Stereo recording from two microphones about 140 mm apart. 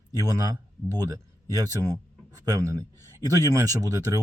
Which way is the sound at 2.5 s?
25° right (ahead or behind).